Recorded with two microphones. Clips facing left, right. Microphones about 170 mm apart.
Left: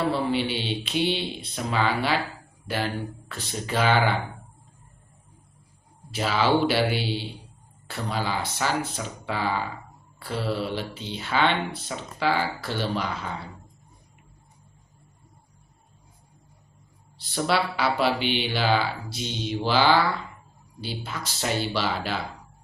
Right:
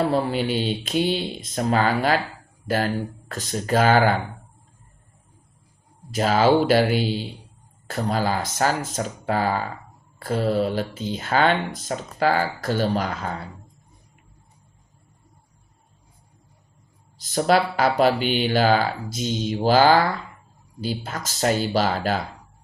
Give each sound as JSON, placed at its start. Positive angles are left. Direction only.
{"t": 0.0, "sound": "speech", "side_deg": -40}
{"t": 6.1, "sound": "speech", "side_deg": -45}
{"t": 17.2, "sound": "speech", "side_deg": -45}